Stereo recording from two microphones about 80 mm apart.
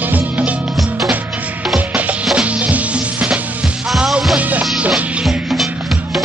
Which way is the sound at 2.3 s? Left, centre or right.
Centre.